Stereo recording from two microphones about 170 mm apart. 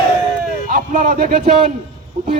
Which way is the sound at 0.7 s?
55° right (ahead or behind).